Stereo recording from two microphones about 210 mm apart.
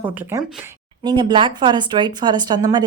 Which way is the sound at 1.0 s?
20° right (ahead or behind).